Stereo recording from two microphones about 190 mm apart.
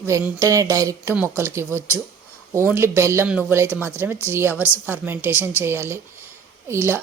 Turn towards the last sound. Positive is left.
turn(degrees=-15)  # may be behind; listen again after turning